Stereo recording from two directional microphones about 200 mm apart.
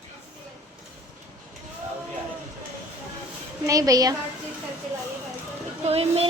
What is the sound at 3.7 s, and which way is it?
Speech, 15° right (ahead or behind).